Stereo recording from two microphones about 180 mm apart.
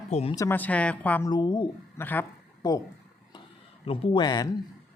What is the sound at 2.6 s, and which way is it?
Speech, 25° left (ahead or behind).